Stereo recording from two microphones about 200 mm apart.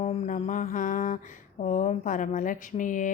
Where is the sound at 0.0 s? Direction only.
35° left (ahead or behind).